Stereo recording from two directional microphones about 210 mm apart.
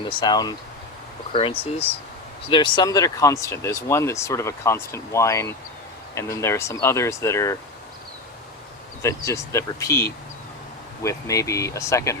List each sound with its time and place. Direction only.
0.1 s speech: 20° left (ahead or behind)
1.5 s speech: 10° left (ahead or behind)
2.5 s speech: 20° left (ahead or behind)
9.0 s speech: 15° left (ahead or behind)